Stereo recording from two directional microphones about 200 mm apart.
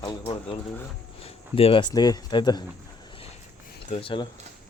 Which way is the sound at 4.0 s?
25° left (ahead or behind).